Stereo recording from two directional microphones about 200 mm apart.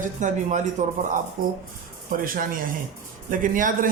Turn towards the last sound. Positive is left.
turn(degrees=-40)  # may be behind; listen again after turning